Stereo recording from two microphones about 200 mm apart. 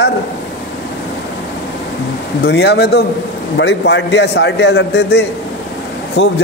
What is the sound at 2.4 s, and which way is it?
A man's voice, 55° left (ahead or behind).